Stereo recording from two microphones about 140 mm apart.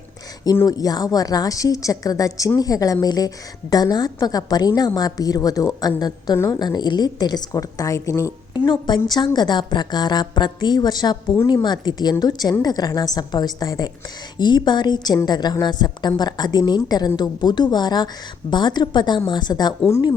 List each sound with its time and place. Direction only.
0.5 s a woman's voice: 25° left (ahead or behind)
6.3 s a woman's voice: 20° left (ahead or behind)
6.6 s a woman's voice: 30° left (ahead or behind)
8.5 s a woman's voice: 30° left (ahead or behind)